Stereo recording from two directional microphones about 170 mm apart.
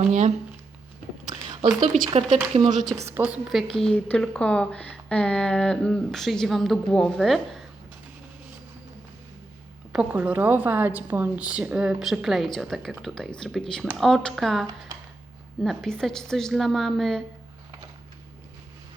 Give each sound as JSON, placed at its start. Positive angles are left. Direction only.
{"t": 0.1, "sound": "speech", "side_deg": -45}
{"t": 1.3, "sound": "a sound", "side_deg": -20}
{"t": 2.0, "sound": "speech", "side_deg": -45}
{"t": 2.9, "sound": "a woman's voice", "side_deg": -15}
{"t": 9.9, "sound": "a woman's voice", "side_deg": -10}